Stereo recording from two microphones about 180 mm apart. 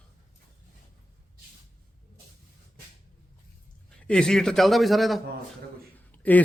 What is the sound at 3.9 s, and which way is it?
A man's voice, 5° left (ahead or behind).